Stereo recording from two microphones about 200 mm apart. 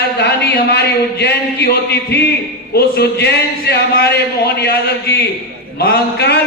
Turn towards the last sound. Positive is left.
turn(degrees=50)  # may be behind; listen again after turning